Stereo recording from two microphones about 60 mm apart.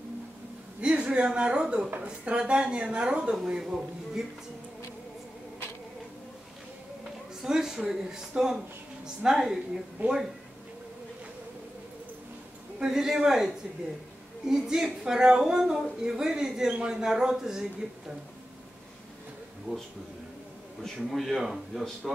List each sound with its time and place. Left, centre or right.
0.7 s a woman's voice: centre
7.4 s a woman's voice: centre
10.0 s speech: right
12.7 s a woman's voice: centre
20.8 s a man's voice: centre